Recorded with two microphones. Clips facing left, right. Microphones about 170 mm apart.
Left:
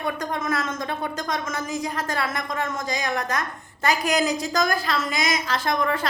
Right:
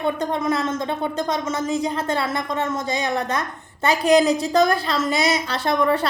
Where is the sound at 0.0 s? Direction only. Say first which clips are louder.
Right 5 dB; 25° right (ahead or behind).